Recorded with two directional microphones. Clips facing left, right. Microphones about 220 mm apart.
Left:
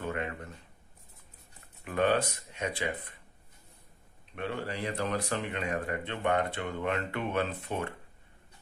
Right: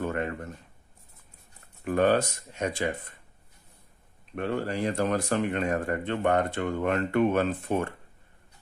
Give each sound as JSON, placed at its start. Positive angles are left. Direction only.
{"t": 0.0, "sound": "a sound", "side_deg": -45}
{"t": 1.9, "sound": "speech", "side_deg": -45}
{"t": 4.4, "sound": "speech", "side_deg": -45}